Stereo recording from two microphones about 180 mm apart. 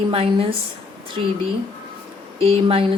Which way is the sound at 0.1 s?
30° right (ahead or behind).